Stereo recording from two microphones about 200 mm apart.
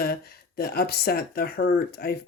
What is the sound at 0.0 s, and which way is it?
Speech, 50° left (ahead or behind).